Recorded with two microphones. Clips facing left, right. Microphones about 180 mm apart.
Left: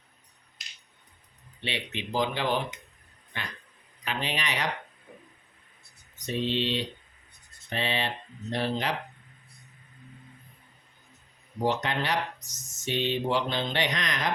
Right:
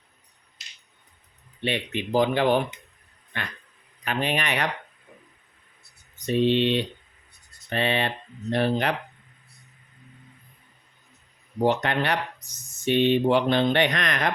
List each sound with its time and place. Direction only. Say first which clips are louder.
1.6 s speech: right 7 dB; 50° right (ahead or behind)
6.1 s speech: right 8 dB; 60° right (ahead or behind)
11.6 s speech: right 5 dB; 60° right (ahead or behind)